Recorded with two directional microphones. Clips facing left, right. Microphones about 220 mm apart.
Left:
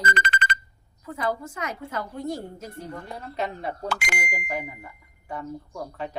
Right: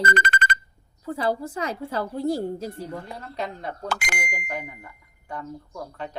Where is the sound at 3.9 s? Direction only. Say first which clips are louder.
Right 1 dB; 45° right (ahead or behind).